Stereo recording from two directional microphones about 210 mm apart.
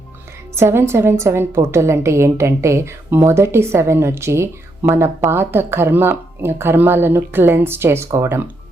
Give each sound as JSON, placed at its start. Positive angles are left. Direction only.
{"t": 0.5, "sound": "a woman's voice", "side_deg": -10}